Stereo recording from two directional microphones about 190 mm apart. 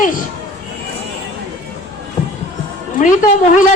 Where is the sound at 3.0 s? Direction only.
40° left (ahead or behind).